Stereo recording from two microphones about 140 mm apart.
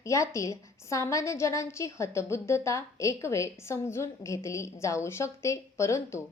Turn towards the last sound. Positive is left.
turn(degrees=20)  # may be behind; listen again after turning